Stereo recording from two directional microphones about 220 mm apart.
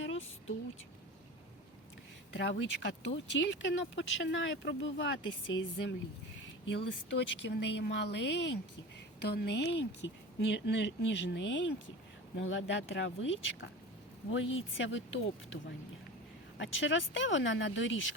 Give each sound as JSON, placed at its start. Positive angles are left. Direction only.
{"t": 0.0, "sound": "a sound", "side_deg": 60}
{"t": 2.3, "sound": "speech", "side_deg": 55}
{"t": 16.6, "sound": "speech", "side_deg": 60}